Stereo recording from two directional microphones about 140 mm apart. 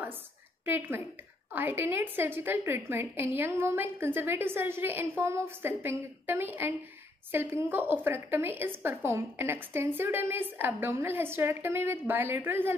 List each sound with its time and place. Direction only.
0.7 s a woman's voice: 15° right (ahead or behind)